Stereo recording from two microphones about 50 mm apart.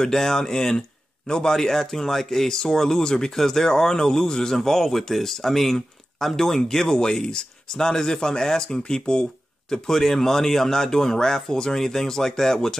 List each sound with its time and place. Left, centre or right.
0.0 s speech: centre